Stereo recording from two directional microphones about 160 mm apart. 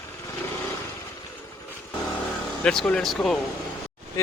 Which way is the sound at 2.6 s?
5° left (ahead or behind).